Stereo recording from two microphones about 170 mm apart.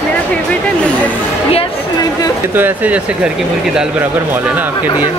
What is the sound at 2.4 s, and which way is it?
Speech, 10° right (ahead or behind).